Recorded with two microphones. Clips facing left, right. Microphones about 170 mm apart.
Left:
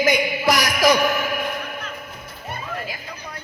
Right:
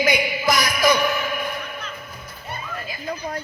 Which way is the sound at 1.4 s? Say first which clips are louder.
Left 2 dB; 60° left (ahead or behind).